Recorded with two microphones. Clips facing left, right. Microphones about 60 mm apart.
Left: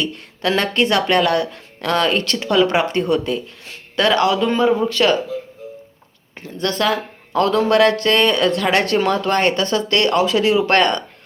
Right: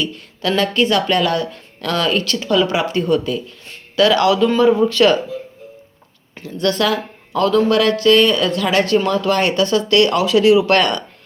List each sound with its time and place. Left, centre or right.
0.0 s speech: left
1.8 s speech: left
4.1 s speech: left
6.3 s speech: left
6.9 s speech: left